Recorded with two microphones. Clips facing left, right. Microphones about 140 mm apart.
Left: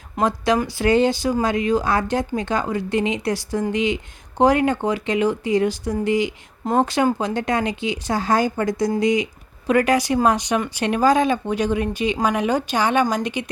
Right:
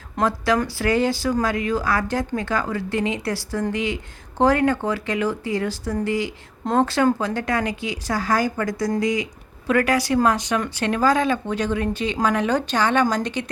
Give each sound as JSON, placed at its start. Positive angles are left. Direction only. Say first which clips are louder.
{"t": 0.2, "sound": "speech", "louder": "left 1 dB", "side_deg": 20}